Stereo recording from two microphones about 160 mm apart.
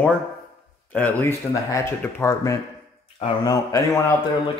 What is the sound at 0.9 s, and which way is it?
A man's voice, 10° left (ahead or behind).